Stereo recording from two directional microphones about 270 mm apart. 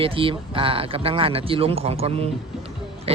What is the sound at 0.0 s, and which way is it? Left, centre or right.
A man's voice, centre.